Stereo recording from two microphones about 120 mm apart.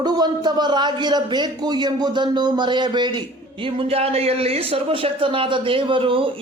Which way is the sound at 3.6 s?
50° right (ahead or behind).